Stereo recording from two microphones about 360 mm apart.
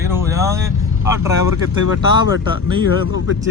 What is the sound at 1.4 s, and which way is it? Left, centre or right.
Speech, left.